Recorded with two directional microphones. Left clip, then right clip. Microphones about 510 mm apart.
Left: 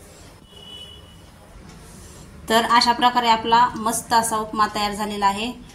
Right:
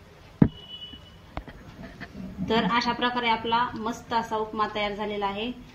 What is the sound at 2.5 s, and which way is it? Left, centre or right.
A woman's voice, right.